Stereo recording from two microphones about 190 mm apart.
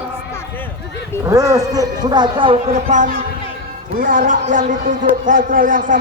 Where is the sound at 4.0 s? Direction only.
45° right (ahead or behind).